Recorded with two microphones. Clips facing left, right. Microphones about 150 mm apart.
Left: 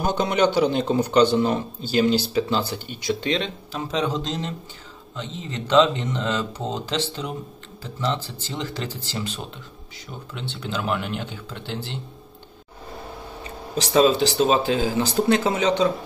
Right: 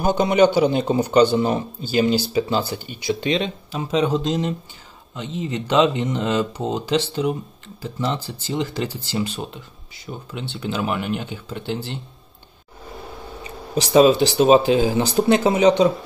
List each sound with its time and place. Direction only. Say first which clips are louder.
0.0 s a man's voice: right 4 dB; 5° right (ahead or behind)
10.3 s a man's voice: right 3 dB; 10° right (ahead or behind)
13.7 s a man's voice: right 4 dB; 15° right (ahead or behind)